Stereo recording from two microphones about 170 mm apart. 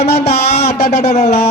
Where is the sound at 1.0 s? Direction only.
40° left (ahead or behind).